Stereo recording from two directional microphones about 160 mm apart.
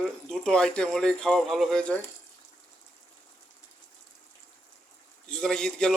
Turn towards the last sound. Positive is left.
turn(degrees=5)  # may be behind; listen again after turning